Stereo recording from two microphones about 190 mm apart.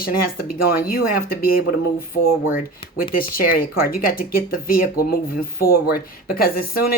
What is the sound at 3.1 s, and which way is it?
Speech, 50° left (ahead or behind).